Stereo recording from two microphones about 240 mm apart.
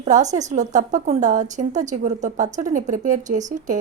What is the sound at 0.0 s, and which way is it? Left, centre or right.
A woman's voice, right.